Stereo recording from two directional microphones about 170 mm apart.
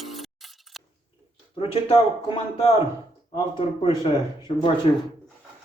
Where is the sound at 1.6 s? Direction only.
35° left (ahead or behind).